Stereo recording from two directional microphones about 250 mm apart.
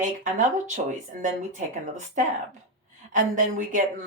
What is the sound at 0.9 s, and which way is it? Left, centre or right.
A woman's voice, right.